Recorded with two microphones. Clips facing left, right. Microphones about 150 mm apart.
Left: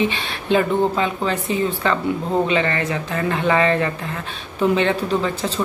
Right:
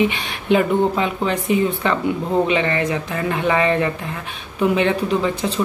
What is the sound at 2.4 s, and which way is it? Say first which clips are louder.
Speech: right 1 dB; 20° right (ahead or behind).